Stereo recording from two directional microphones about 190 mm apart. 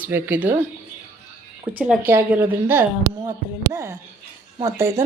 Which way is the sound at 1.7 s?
5° right (ahead or behind).